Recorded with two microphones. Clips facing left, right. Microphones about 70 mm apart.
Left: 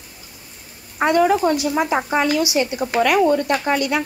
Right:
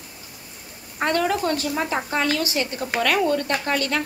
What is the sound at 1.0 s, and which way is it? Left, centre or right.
Speech, centre.